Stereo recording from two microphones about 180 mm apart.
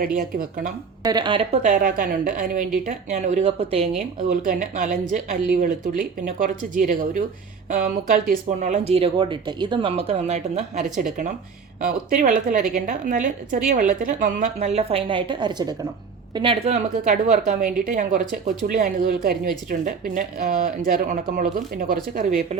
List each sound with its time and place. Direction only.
0.2 s a woman's voice: 50° right (ahead or behind)
1.0 s speech: 25° right (ahead or behind)
1.6 s a woman's voice: 45° right (ahead or behind)